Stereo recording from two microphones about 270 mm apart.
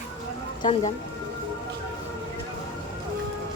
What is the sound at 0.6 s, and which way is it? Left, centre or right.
Speech, centre.